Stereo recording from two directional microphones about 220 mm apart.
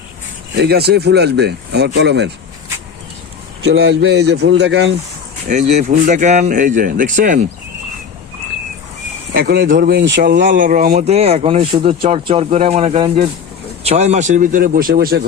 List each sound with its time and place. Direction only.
0.5 s speech: 45° right (ahead or behind)
3.6 s speech: 50° right (ahead or behind)
5.5 s speech: 30° right (ahead or behind)
9.3 s speech: 45° right (ahead or behind)